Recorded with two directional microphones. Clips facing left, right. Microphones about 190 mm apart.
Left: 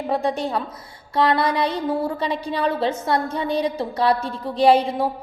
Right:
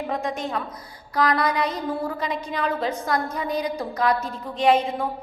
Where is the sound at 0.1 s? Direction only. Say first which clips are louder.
Left 7 dB; 35° left (ahead or behind).